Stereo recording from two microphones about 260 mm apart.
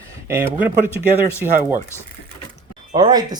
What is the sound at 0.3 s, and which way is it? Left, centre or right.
Speech, centre.